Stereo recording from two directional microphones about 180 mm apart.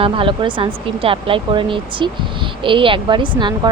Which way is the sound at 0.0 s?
30° right (ahead or behind).